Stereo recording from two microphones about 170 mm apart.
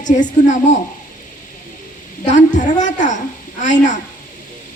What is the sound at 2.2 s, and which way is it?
A woman's voice, 45° left (ahead or behind).